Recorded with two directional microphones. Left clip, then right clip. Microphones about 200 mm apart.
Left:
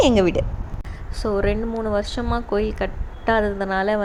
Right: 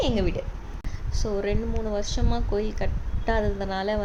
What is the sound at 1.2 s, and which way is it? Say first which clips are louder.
A woman's voice: left 6 dB; 15° left (ahead or behind).